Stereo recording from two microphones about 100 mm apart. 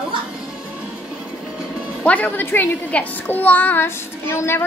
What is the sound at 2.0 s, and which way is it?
A child's voice, 15° left (ahead or behind).